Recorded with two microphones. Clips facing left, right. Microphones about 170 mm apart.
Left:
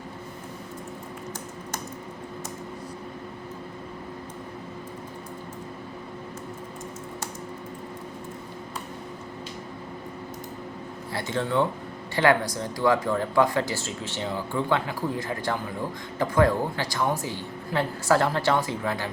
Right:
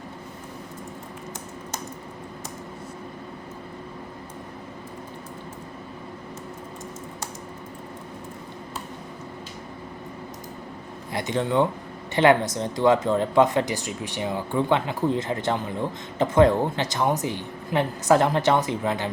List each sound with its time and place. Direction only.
11.1 s speech: 20° right (ahead or behind)